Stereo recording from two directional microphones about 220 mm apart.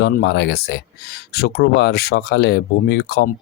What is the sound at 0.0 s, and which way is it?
Speech, 50° left (ahead or behind).